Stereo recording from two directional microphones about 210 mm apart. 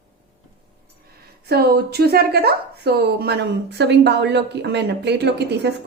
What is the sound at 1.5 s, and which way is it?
A woman's voice, 50° right (ahead or behind).